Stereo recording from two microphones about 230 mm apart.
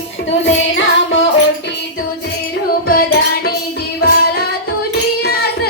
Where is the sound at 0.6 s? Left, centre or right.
Left.